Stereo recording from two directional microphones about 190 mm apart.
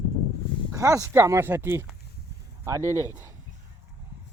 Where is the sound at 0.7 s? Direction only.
15° right (ahead or behind).